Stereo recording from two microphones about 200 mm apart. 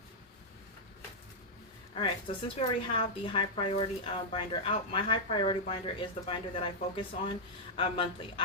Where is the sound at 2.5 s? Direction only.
25° left (ahead or behind).